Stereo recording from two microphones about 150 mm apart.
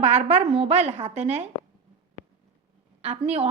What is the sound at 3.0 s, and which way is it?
Speech, 45° right (ahead or behind).